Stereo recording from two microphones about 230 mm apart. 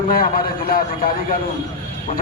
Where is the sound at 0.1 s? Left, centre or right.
Left.